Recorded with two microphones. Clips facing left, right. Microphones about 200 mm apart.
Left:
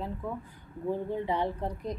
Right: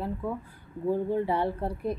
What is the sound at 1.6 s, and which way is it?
Speech, 10° right (ahead or behind).